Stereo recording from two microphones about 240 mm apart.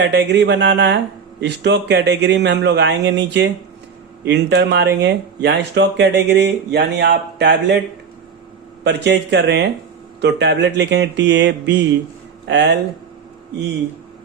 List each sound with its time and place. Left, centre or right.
0.0 s speech: right
8.8 s speech: right